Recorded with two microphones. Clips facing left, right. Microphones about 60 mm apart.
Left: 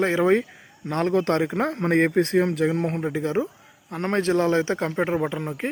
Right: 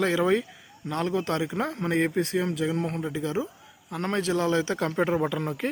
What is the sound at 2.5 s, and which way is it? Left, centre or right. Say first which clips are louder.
Speech: left 4 dB; left.